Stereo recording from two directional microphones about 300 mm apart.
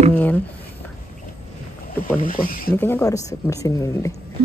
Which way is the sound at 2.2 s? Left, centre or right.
Left.